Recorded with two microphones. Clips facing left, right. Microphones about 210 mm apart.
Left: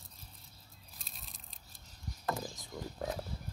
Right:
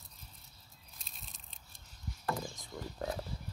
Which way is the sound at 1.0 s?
Centre (ahead or behind).